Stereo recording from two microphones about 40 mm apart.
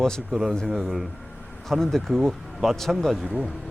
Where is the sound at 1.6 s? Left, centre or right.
Centre.